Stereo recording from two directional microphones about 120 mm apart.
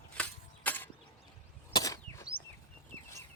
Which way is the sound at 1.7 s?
30° left (ahead or behind).